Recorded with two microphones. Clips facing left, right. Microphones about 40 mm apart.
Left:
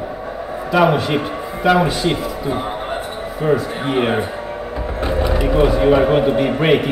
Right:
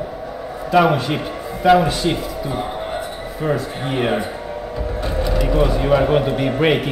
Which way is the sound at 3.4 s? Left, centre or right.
Centre.